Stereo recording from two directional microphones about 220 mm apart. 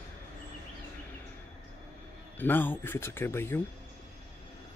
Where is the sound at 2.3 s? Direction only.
10° left (ahead or behind).